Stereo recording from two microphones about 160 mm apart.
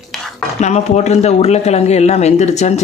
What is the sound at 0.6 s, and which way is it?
Speech, 45° left (ahead or behind).